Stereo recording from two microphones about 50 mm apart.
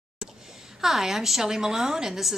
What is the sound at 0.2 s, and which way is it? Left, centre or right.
A woman's voice, centre.